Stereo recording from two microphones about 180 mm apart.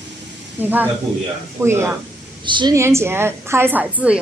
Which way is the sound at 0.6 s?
10° right (ahead or behind).